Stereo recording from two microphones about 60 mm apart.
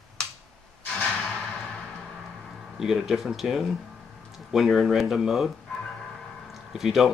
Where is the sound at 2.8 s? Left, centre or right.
Centre.